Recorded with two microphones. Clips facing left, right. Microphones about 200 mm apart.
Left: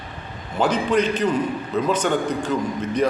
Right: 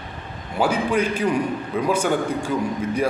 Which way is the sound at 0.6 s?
10° right (ahead or behind).